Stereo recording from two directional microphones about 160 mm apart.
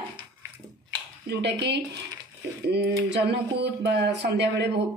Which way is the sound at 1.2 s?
90° right.